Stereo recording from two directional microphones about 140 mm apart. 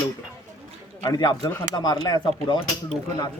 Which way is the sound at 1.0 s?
30° left (ahead or behind).